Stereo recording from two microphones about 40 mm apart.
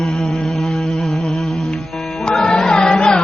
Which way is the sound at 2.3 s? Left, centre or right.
Centre.